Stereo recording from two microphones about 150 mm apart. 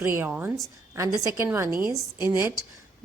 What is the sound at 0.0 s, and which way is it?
A woman's voice, 15° right (ahead or behind).